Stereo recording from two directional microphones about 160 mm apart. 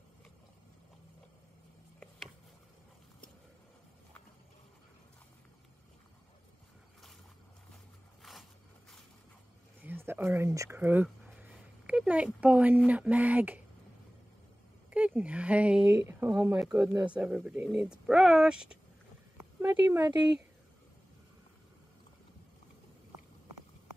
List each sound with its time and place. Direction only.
8.2 s a sound: centre (ahead or behind)
9.8 s speech: 15° right (ahead or behind)
14.9 s speech: 10° right (ahead or behind)